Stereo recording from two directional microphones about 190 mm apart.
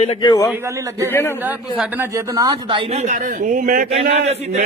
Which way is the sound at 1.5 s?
10° right (ahead or behind).